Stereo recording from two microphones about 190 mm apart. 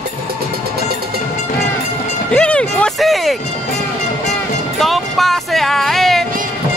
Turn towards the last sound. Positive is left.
turn(degrees=0)  # may be behind; listen again after turning